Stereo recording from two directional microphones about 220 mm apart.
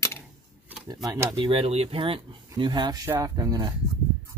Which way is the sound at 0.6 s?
15° right (ahead or behind).